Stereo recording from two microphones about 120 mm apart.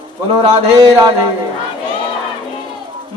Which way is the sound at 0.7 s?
35° right (ahead or behind).